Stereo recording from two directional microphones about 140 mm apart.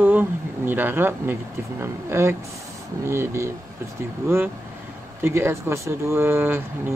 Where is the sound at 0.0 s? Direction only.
15° right (ahead or behind).